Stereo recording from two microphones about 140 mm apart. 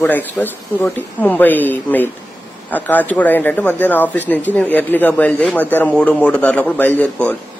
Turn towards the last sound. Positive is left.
turn(degrees=10)  # may be behind; listen again after turning